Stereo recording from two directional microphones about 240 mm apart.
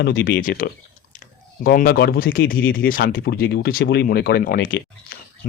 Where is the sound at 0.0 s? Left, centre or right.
Left.